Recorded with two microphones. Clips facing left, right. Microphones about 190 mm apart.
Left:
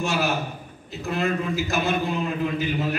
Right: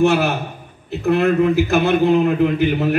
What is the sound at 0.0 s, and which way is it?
A man's voice, 60° right (ahead or behind).